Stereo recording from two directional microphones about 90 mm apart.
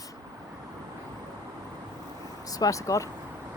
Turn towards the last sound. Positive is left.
turn(degrees=40)  # may be behind; listen again after turning